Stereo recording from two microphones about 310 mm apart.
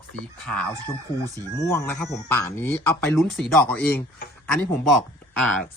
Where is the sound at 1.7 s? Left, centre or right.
Centre.